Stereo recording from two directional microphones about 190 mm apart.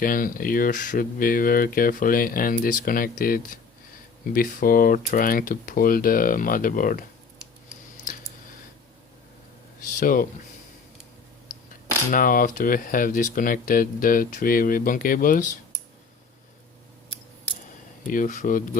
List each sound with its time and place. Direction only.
0.0 s speech: 45° left (ahead or behind)
9.8 s speech: 45° left (ahead or behind)
12.1 s speech: 50° left (ahead or behind)
18.1 s speech: 40° left (ahead or behind)